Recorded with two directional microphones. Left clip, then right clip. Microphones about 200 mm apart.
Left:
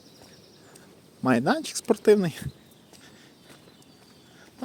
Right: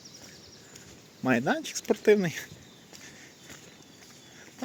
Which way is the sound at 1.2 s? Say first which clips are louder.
Left 3 dB; 25° left (ahead or behind).